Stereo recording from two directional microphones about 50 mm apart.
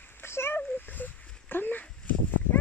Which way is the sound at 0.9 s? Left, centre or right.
Left.